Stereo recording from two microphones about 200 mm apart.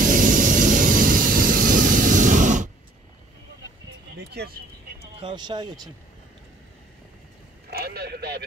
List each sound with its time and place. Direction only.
0.0 s vehicle: 40° right (ahead or behind)
4.3 s speech: 55° right (ahead or behind)
5.2 s speech: 20° right (ahead or behind)
7.7 s a man's voice: 50° right (ahead or behind)